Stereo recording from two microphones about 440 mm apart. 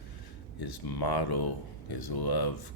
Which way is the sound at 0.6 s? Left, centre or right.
Left.